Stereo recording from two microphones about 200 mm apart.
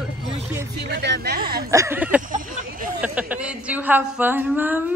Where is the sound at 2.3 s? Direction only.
45° right (ahead or behind).